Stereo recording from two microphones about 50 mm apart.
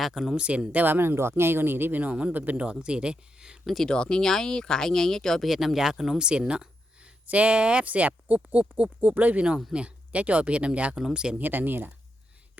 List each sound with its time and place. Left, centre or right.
0.0 s speech: centre
0.3 s speech: right
0.9 s speech: right
1.1 s speech: right
2.0 s speech: right
2.6 s speech: centre
3.8 s speech: centre
5.5 s speech: centre; by 10.9 s right
10.9 s speech: centre
11.3 s speech: right